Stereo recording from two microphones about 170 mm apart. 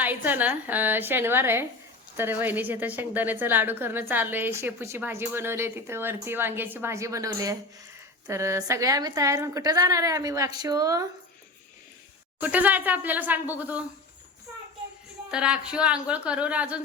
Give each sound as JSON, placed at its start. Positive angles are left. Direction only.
{"t": 0.0, "sound": "a woman's voice", "side_deg": -10}
{"t": 12.4, "sound": "a woman's voice", "side_deg": -10}
{"t": 15.3, "sound": "a woman's voice", "side_deg": -5}